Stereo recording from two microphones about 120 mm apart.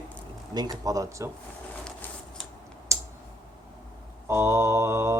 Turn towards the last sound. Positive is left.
turn(degrees=-20)  # may be behind; listen again after turning